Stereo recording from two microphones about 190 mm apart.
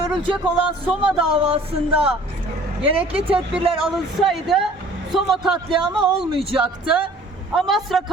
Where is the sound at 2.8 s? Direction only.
30° right (ahead or behind).